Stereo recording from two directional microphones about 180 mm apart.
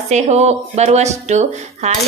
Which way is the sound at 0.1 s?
40° right (ahead or behind).